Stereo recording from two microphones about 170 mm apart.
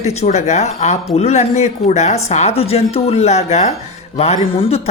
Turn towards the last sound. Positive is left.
turn(degrees=35)  # may be behind; listen again after turning